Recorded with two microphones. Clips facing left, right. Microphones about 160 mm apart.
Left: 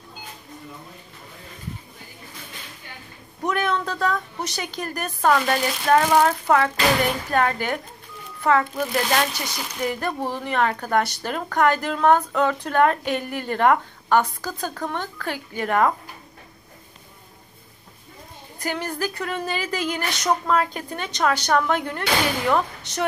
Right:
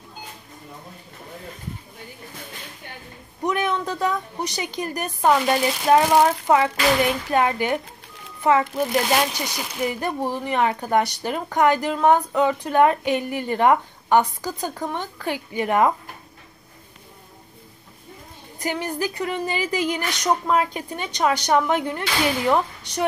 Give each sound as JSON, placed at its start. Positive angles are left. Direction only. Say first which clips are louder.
{"t": 3.4, "sound": "a sound", "louder": "right 1 dB", "side_deg": -15}
{"t": 4.8, "sound": "speech", "louder": "right 1 dB", "side_deg": -15}
{"t": 18.6, "sound": "speech", "louder": "right 1 dB", "side_deg": -20}